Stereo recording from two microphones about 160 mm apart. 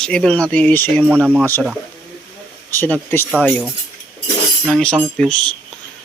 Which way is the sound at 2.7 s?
15° left (ahead or behind).